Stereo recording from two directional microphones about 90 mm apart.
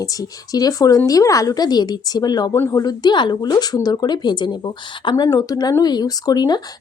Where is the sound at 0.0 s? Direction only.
40° left (ahead or behind).